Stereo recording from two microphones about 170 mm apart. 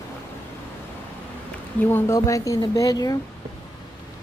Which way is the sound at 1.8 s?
15° left (ahead or behind).